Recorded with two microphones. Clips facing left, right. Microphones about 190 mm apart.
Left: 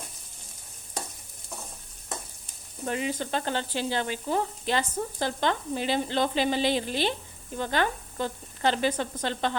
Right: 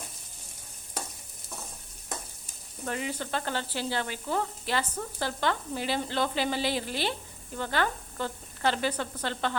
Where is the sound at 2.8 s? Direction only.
20° left (ahead or behind).